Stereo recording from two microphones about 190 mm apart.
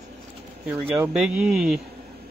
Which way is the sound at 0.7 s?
10° right (ahead or behind).